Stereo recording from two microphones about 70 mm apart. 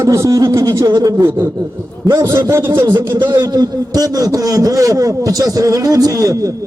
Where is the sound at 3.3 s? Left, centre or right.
Right.